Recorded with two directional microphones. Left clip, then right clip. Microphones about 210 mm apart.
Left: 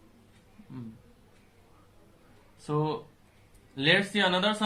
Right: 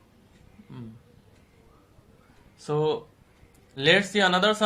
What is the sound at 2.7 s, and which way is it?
Speech, 50° right (ahead or behind).